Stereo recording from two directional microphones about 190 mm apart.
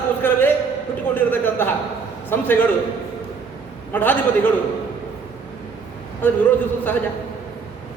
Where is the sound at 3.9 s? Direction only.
10° left (ahead or behind).